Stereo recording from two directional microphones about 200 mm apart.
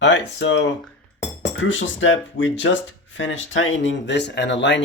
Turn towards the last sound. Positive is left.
turn(degrees=65)  # may be behind; listen again after turning